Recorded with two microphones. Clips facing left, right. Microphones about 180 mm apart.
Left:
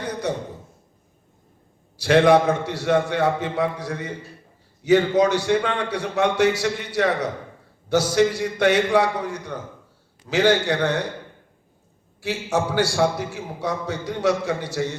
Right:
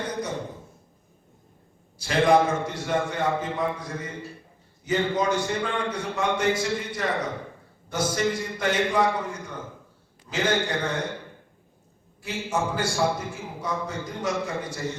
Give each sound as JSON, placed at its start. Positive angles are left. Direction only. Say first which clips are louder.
{"t": 2.0, "sound": "a man's voice", "louder": "left 5 dB", "side_deg": 75}
{"t": 12.2, "sound": "a man's voice", "louder": "left 4 dB", "side_deg": 75}